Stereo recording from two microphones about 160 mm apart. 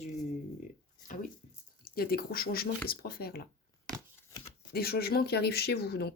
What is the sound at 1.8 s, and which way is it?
Speech, 70° left (ahead or behind).